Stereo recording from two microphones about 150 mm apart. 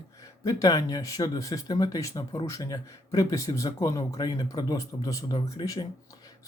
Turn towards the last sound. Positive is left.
turn(degrees=25)  # may be behind; listen again after turning